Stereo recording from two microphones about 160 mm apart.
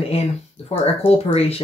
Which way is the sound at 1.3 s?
40° left (ahead or behind).